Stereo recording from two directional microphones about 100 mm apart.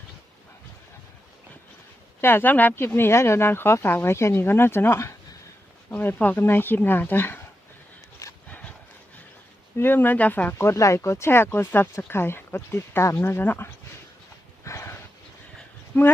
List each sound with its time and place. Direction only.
2.2 s speech: 20° left (ahead or behind)
8.4 s dog: 15° left (ahead or behind)
9.7 s speech: 20° left (ahead or behind)
14.6 s a sound: 30° left (ahead or behind)
15.9 s speech: 25° left (ahead or behind)